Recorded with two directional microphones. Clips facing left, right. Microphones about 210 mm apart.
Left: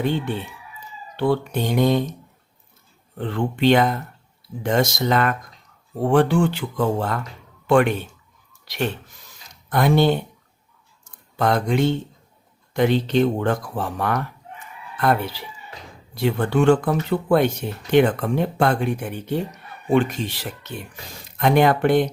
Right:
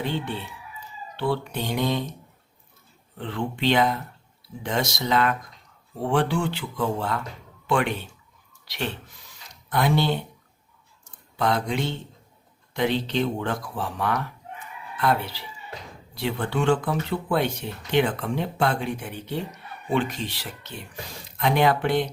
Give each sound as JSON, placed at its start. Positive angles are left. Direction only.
{"t": 1.1, "sound": "speech", "side_deg": 45}
{"t": 3.2, "sound": "speech", "side_deg": 50}
{"t": 11.3, "sound": "speech", "side_deg": 50}
{"t": 16.1, "sound": "speech", "side_deg": 50}